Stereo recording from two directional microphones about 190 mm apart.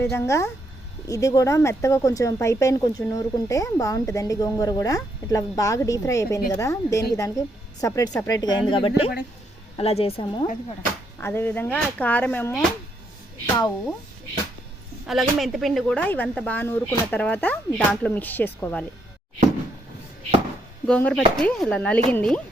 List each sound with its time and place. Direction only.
0.0 s a woman's voice: 15° left (ahead or behind); by 10.6 s 35° left (ahead or behind)
11.2 s speech: 10° left (ahead or behind)
15.0 s speech: centre (ahead or behind)
20.8 s speech: 5° left (ahead or behind)